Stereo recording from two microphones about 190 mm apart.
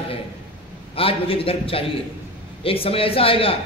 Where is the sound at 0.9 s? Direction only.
30° left (ahead or behind).